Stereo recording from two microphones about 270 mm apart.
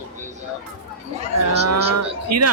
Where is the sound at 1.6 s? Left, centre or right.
Right.